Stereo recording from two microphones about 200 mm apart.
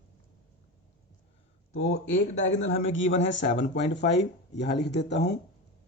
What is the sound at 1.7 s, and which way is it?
Speech, 85° left.